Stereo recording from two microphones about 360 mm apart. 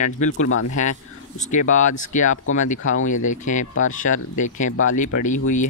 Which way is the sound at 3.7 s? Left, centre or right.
Left.